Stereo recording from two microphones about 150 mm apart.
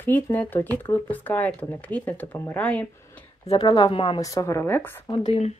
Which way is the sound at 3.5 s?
30° left (ahead or behind).